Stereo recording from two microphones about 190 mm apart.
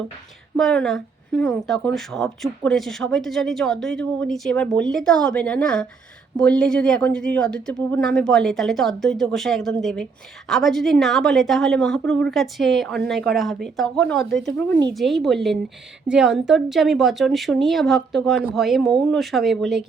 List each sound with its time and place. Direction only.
0.5 s speech: 5° left (ahead or behind)